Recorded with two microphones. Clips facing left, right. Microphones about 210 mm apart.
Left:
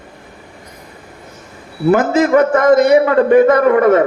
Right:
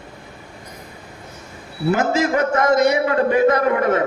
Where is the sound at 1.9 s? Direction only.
50° left (ahead or behind).